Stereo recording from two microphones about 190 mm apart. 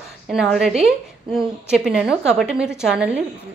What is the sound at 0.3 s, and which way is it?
A woman's voice, centre (ahead or behind).